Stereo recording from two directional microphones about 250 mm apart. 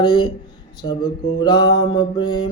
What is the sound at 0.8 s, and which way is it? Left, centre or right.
Speech, centre.